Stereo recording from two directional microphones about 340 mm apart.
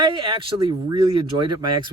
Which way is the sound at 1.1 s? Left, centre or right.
Right.